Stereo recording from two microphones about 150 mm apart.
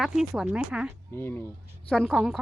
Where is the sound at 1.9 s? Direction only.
Centre (ahead or behind).